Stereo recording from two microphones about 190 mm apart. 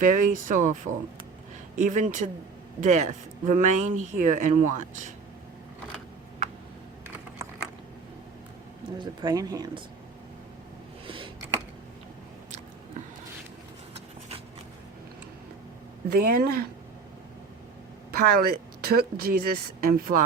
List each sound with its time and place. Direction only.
0.0 s speech: 45° right (ahead or behind)
9.0 s speech: 20° right (ahead or behind)
11.0 s a sound: 25° right (ahead or behind)
16.0 s speech: 55° right (ahead or behind)
18.2 s speech: 50° right (ahead or behind)